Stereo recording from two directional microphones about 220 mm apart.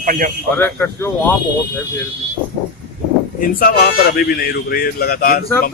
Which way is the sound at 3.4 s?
45° left (ahead or behind).